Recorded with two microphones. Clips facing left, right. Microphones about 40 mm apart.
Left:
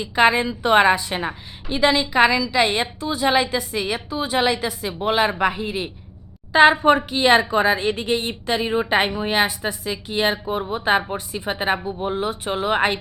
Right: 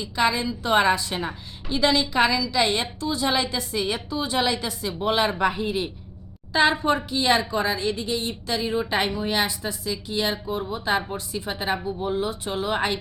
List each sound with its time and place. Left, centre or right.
0.0 s a woman's voice: left; by 5.9 s centre
6.5 s a woman's voice: left